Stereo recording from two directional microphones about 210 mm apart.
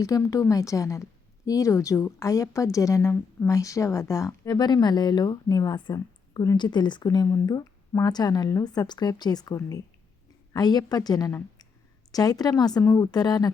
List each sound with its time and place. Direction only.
0.0 s a woman's voice: 15° left (ahead or behind)